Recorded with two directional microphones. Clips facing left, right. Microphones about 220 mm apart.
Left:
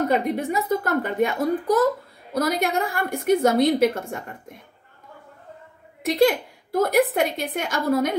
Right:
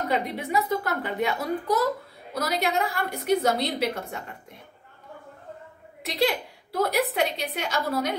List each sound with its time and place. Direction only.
0.1 s a woman's voice: 45° left (ahead or behind)
6.0 s a woman's voice: 50° left (ahead or behind)